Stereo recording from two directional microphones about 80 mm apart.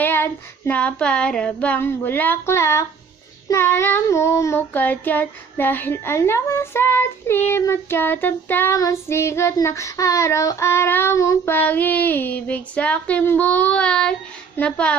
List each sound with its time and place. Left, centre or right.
0.0 s child singing: left
0.7 s child singing: centre
1.8 s speech: left
4.1 s child singing: left
4.7 s speech: left
8.7 s child singing: left
11.5 s speech: left
14.6 s child singing: centre